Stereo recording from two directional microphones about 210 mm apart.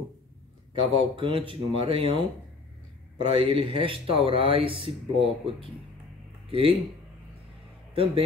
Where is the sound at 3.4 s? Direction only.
25° right (ahead or behind).